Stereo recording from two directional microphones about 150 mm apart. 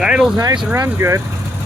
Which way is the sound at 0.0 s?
5° right (ahead or behind).